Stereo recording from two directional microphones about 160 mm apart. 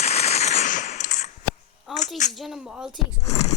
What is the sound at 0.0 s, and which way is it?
Machine gun, 45° left (ahead or behind).